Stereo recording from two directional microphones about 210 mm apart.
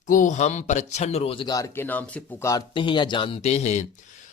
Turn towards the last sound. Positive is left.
turn(degrees=35)  # may be behind; listen again after turning